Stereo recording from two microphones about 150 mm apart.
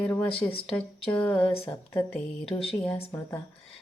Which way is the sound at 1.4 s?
40° left (ahead or behind).